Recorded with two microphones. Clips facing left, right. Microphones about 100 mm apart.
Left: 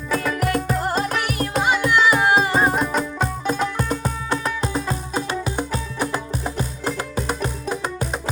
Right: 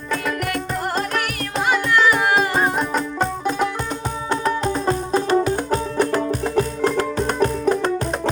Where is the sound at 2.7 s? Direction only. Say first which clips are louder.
Even; 5° left (ahead or behind).